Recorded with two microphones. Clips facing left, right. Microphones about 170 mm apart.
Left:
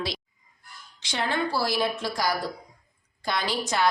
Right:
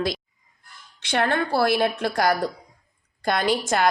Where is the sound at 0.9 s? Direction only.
60° right (ahead or behind).